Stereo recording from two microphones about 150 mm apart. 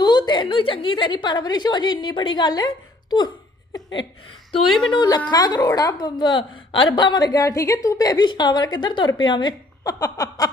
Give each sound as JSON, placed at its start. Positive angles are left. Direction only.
{"t": 0.0, "sound": "a woman's voice", "side_deg": 30}
{"t": 4.9, "sound": "a woman's voice", "side_deg": 30}